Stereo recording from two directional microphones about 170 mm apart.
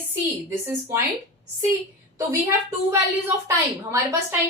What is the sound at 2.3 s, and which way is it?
A woman's voice, 15° right (ahead or behind).